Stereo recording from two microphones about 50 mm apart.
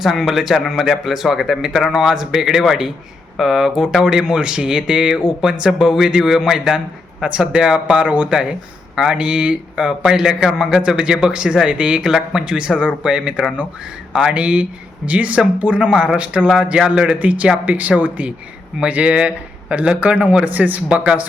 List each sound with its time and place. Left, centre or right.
0.0 s a man's voice: centre; by 9.8 s right
10.0 s a man's voice: centre
17.2 s a man's voice: right